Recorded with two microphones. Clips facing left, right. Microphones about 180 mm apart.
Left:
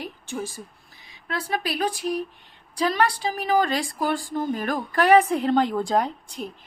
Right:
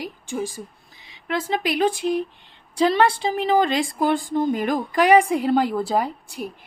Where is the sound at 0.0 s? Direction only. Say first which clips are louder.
Right 4 dB; 15° right (ahead or behind).